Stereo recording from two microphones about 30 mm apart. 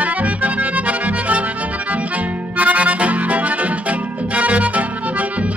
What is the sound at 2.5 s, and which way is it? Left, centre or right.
Accordion, right.